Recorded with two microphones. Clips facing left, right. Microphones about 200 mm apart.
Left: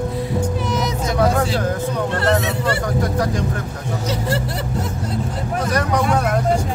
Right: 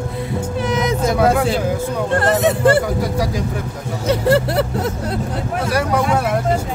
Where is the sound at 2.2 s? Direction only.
50° right (ahead or behind).